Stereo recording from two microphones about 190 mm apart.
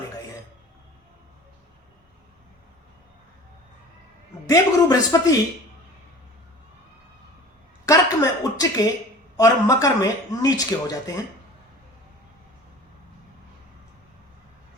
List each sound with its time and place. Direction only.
4.4 s speech: 20° left (ahead or behind)
7.9 s a sound: 15° left (ahead or behind)
9.4 s speech: 15° left (ahead or behind)